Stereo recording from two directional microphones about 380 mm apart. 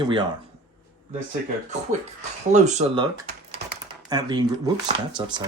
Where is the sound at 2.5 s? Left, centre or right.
Centre.